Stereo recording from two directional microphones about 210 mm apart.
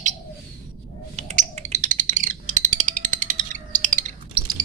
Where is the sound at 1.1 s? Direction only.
30° right (ahead or behind).